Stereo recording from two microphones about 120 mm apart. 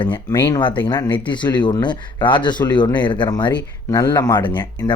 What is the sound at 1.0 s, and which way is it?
Speech, 15° left (ahead or behind).